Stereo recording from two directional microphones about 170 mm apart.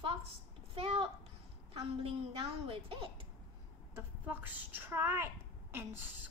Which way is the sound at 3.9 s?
10° right (ahead or behind).